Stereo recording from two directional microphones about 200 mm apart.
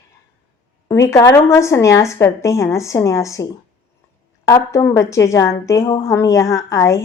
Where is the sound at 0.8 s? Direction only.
15° left (ahead or behind).